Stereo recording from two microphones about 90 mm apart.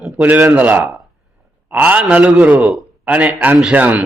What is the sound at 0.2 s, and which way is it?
A man's voice, 20° right (ahead or behind).